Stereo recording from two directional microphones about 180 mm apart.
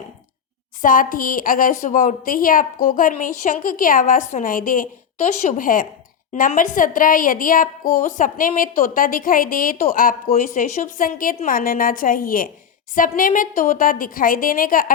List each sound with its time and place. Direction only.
0.8 s a woman's voice: 50° left (ahead or behind)